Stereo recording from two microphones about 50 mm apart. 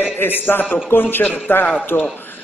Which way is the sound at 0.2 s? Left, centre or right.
Left.